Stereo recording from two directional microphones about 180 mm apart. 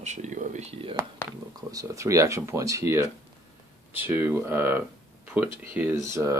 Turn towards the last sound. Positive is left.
turn(degrees=-15)  # may be behind; listen again after turning